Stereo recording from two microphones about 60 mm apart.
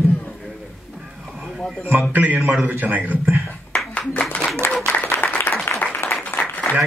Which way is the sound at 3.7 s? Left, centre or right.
Centre.